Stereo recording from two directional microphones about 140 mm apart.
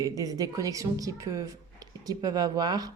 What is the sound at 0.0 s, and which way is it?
Speech, 25° right (ahead or behind).